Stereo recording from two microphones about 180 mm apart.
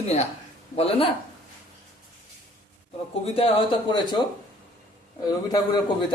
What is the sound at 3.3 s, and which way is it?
Speech, 30° left (ahead or behind).